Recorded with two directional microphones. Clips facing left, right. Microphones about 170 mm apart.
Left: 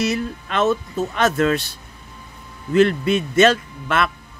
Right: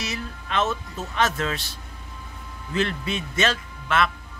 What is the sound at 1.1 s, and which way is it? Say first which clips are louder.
Speech: left 6 dB; 55° left (ahead or behind).